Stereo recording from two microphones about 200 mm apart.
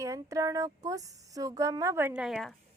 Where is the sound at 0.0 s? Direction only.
15° right (ahead or behind); by 2.6 s centre (ahead or behind).